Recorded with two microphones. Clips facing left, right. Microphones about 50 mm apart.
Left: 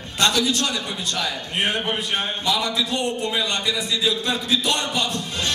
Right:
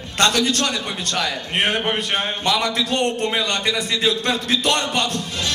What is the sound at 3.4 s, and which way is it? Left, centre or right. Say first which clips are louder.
A man's voice: right 2 dB; right.